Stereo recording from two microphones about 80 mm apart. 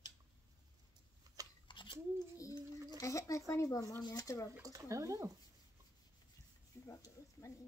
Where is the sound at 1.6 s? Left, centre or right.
Left.